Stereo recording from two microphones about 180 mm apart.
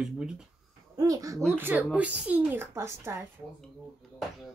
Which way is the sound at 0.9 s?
20° right (ahead or behind).